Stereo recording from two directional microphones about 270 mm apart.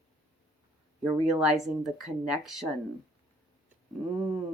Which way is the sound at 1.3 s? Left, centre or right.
Centre.